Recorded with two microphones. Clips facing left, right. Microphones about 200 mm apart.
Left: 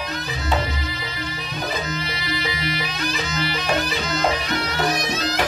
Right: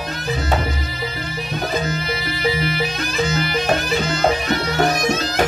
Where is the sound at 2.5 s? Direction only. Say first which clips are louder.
Right 6 dB; 45° right (ahead or behind).